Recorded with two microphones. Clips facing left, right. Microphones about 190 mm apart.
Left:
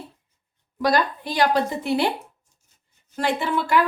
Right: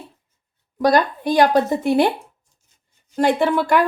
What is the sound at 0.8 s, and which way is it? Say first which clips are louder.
Speech: right 5 dB; 45° right (ahead or behind).